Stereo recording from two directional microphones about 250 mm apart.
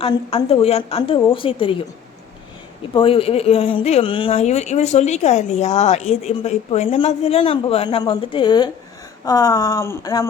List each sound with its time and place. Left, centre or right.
0.0 s speech: left
2.9 s speech: left